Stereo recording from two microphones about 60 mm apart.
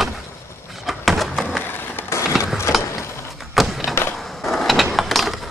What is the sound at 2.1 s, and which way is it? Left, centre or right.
Run, left.